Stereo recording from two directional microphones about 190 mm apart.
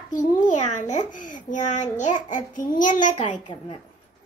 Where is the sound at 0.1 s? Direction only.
40° left (ahead or behind).